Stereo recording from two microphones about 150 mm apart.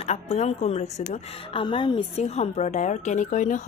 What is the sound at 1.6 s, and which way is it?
A woman's voice, 35° left (ahead or behind).